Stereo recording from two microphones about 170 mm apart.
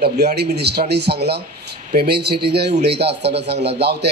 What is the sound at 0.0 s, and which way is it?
A man's voice, 75° right (ahead or behind).